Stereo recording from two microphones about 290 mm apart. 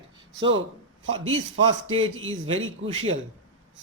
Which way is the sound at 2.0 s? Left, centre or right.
Right.